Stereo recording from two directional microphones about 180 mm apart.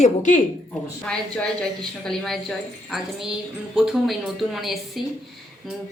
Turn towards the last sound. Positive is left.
turn(degrees=0)  # may be behind; listen again after turning